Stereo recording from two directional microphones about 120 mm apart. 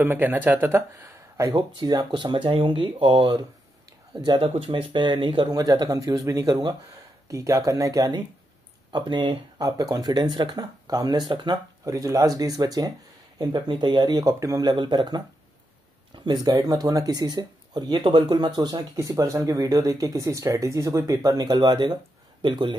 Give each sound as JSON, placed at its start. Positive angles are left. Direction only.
{"t": 0.0, "sound": "speech", "side_deg": -15}
{"t": 1.8, "sound": "speech", "side_deg": -35}
{"t": 5.6, "sound": "speech", "side_deg": -30}
{"t": 14.7, "sound": "speech", "side_deg": -40}
{"t": 16.3, "sound": "speech", "side_deg": -30}